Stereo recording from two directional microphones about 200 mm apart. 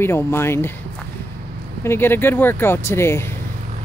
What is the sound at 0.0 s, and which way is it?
Speech, 10° left (ahead or behind).